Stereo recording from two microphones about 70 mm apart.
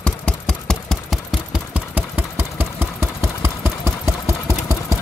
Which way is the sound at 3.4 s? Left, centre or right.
Right.